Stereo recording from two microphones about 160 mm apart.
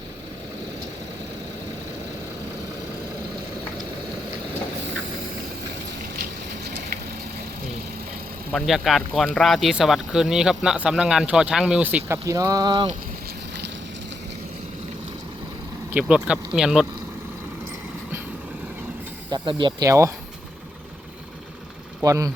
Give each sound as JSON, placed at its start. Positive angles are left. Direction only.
{"t": 8.5, "sound": "speech", "side_deg": 0}
{"t": 15.9, "sound": "speech", "side_deg": -5}
{"t": 19.3, "sound": "speech", "side_deg": -30}
{"t": 19.9, "sound": "speech", "side_deg": -20}
{"t": 22.0, "sound": "speech", "side_deg": -20}